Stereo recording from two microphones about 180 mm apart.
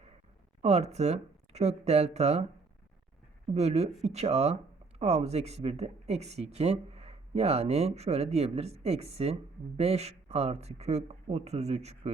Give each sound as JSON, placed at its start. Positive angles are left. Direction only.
{"t": 0.6, "sound": "speech", "side_deg": -35}
{"t": 3.5, "sound": "speech", "side_deg": -35}